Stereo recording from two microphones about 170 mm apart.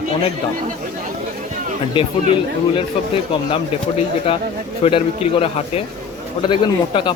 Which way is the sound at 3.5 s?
35° left (ahead or behind).